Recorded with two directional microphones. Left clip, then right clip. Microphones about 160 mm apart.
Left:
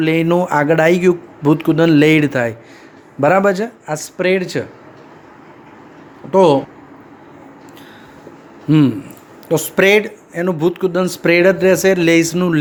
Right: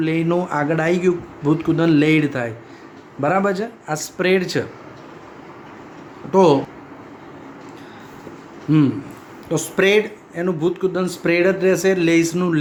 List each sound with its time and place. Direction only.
0.0 s speech: 50° left (ahead or behind); by 4.6 s 25° left (ahead or behind)
6.3 s speech: 35° left (ahead or behind)
8.7 s speech: 40° left (ahead or behind)